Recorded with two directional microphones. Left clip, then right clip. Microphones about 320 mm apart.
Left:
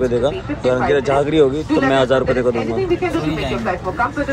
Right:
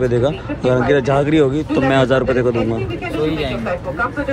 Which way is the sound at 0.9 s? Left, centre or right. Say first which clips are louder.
Right 1 dB; right.